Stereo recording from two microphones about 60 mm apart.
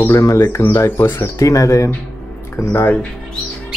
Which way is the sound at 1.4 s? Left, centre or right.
Left.